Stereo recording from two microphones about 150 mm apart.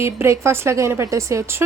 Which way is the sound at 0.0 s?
15° right (ahead or behind).